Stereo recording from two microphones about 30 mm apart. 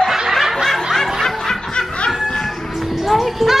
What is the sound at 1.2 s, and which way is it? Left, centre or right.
Snicker, centre.